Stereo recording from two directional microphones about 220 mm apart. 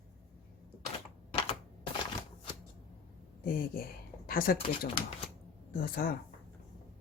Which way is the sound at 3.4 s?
40° left (ahead or behind).